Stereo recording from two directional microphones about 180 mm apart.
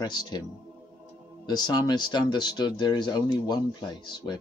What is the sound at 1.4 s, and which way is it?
Speech, 20° left (ahead or behind).